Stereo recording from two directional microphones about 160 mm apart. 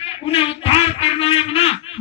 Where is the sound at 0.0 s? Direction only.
35° left (ahead or behind).